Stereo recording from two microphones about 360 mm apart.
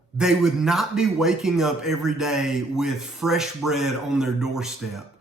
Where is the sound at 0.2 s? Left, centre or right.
Centre.